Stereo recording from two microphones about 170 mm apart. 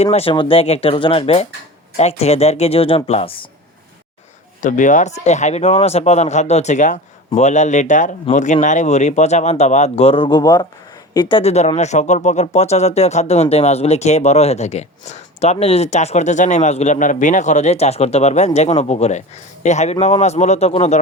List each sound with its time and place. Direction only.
0.0 s speech: 40° left (ahead or behind)
4.6 s speech: 50° left (ahead or behind)